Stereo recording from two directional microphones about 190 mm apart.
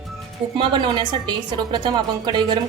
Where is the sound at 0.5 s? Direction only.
25° right (ahead or behind).